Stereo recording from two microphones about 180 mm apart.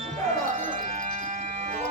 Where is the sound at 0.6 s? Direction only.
45° right (ahead or behind).